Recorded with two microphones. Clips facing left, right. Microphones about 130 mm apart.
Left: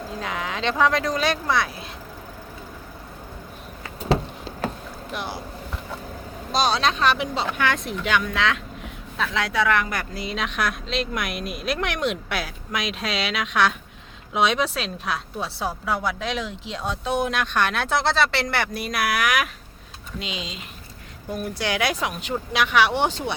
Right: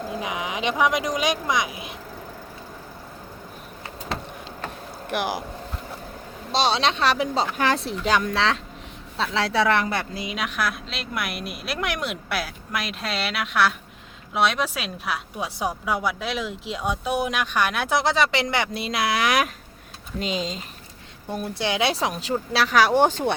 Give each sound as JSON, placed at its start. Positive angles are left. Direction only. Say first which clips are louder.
{"t": 0.2, "sound": "speech", "louder": "left 2 dB", "side_deg": -15}
{"t": 5.0, "sound": "speech", "louder": "right 6 dB", "side_deg": -85}
{"t": 6.5, "sound": "speech", "louder": "even", "side_deg": -25}
{"t": 10.2, "sound": "a woman's voice", "louder": "left 4 dB", "side_deg": -10}
{"t": 20.1, "sound": "speech", "louder": "right 6 dB", "side_deg": -40}
{"t": 21.2, "sound": "speech", "louder": "even", "side_deg": -25}